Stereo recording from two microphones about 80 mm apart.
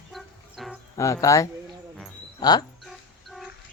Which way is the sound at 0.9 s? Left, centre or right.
Left.